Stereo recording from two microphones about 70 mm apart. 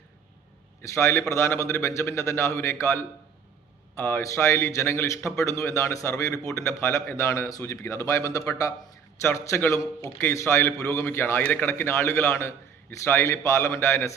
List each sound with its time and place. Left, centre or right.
0.8 s a man's voice: left
3.9 s a man's voice: left